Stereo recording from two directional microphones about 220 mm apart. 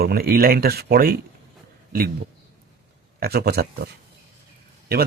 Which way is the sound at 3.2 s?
45° right (ahead or behind).